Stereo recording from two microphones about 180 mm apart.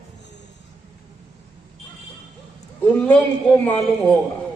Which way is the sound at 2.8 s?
10° left (ahead or behind).